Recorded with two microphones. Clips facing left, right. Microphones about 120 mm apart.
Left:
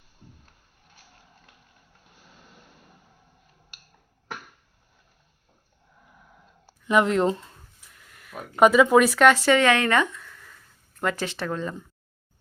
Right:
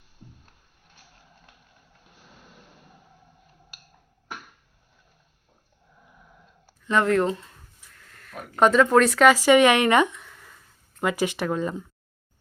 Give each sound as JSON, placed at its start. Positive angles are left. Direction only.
{"t": 6.8, "sound": "speech", "side_deg": 15}